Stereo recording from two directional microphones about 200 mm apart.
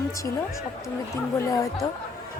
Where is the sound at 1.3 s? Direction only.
15° left (ahead or behind).